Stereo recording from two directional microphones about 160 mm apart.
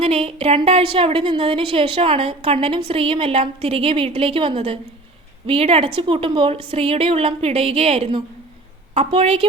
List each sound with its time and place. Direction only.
0.0 s a woman's voice: 35° right (ahead or behind)